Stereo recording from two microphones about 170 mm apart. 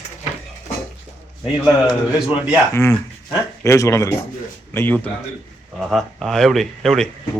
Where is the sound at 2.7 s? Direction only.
15° left (ahead or behind).